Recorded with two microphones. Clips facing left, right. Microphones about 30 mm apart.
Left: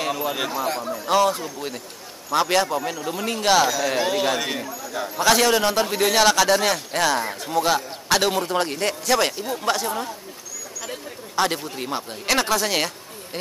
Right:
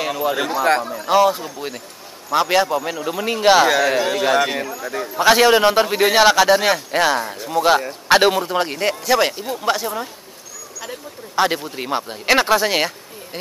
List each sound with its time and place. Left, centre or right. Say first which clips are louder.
0.0 s speech: right 4 dB; centre
4.6 s speech: right 5 dB; right
5.1 s a man's voice: right 5 dB; centre
7.2 s speech: right 2 dB; centre
8.1 s a man's voice: right 7 dB; right
8.4 s speech: right 2 dB; centre
11.3 s speech: right 4 dB; centre